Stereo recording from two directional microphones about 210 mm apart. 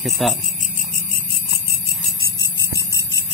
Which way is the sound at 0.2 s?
Centre (ahead or behind).